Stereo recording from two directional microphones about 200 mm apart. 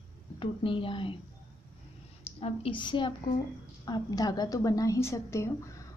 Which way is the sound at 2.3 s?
30° left (ahead or behind).